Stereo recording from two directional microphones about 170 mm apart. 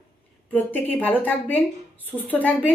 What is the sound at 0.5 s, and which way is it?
A woman's voice, 10° left (ahead or behind).